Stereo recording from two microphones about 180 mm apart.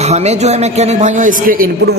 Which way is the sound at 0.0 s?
35° right (ahead or behind).